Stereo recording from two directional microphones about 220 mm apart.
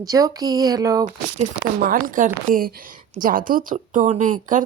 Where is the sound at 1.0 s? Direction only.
35° right (ahead or behind).